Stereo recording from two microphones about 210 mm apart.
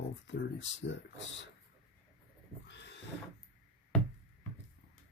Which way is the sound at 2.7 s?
55° left (ahead or behind).